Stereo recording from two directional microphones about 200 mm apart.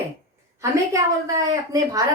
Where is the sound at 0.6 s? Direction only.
15° right (ahead or behind).